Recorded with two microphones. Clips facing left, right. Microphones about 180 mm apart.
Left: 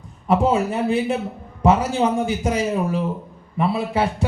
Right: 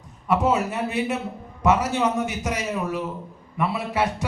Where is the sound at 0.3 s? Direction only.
30° left (ahead or behind).